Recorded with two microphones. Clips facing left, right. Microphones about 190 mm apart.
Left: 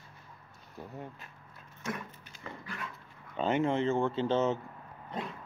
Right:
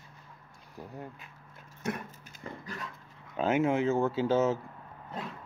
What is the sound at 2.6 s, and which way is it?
Dog, 40° right (ahead or behind).